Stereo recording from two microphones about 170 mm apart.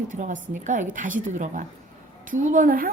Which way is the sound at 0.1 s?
50° right (ahead or behind).